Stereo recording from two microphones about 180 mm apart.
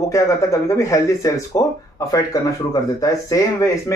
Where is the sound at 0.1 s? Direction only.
15° left (ahead or behind).